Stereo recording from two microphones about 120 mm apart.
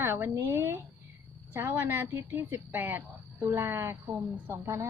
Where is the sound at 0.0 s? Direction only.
20° right (ahead or behind).